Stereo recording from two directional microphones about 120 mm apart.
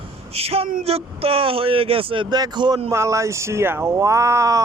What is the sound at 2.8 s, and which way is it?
Speech, 25° right (ahead or behind).